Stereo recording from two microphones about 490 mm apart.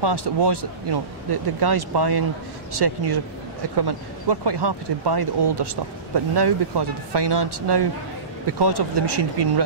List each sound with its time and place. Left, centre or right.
0.0 s speech: right